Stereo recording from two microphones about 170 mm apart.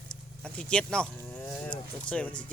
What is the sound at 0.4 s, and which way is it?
Speech, 5° left (ahead or behind).